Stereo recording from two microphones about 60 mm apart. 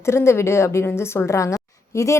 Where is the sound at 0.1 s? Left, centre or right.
Left.